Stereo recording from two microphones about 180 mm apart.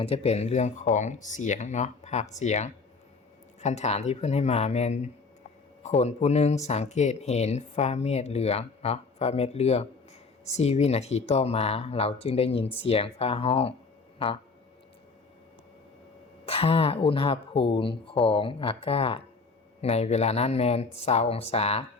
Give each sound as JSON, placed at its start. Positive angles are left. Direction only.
{"t": 0.0, "sound": "speech", "side_deg": 35}
{"t": 16.5, "sound": "speech", "side_deg": 35}